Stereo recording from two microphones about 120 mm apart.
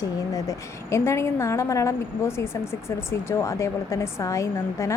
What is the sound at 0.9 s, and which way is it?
A woman's voice, 25° left (ahead or behind).